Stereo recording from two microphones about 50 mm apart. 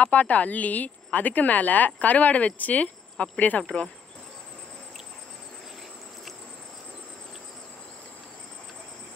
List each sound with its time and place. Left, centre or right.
0.0 s a woman's voice: left